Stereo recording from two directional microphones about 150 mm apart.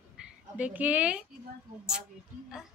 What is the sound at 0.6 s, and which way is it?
Speech, 10° right (ahead or behind).